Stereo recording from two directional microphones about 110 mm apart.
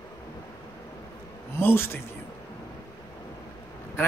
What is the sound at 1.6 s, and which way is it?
Speech, 20° left (ahead or behind).